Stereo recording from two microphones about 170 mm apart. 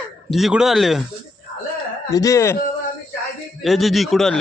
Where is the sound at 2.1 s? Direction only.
20° left (ahead or behind).